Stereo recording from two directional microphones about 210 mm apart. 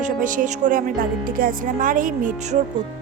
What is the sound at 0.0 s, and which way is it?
A woman's voice, 40° right (ahead or behind).